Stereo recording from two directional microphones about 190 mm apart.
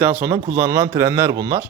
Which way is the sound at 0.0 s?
10° right (ahead or behind).